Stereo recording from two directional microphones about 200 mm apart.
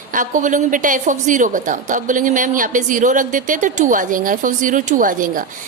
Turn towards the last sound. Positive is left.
turn(degrees=-40)  # may be behind; listen again after turning